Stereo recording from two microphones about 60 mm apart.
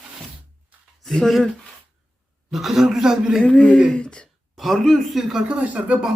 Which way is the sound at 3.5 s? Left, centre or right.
Centre.